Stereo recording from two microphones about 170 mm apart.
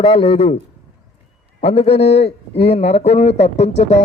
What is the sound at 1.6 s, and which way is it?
A man's voice, 35° left (ahead or behind).